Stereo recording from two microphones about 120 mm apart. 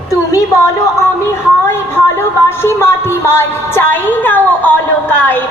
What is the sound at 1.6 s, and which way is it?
Speech, 20° left (ahead or behind).